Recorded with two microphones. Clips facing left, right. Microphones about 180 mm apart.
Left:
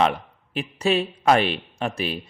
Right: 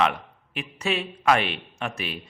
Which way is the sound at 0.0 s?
35° left (ahead or behind).